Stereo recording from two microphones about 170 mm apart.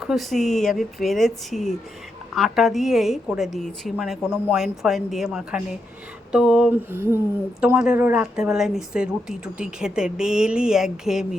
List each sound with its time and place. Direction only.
0.0 s speech: centre (ahead or behind)
6.3 s a sound: 5° right (ahead or behind)
7.6 s speech: 5° right (ahead or behind)